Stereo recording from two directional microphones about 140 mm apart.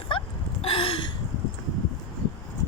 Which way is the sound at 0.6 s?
40° left (ahead or behind).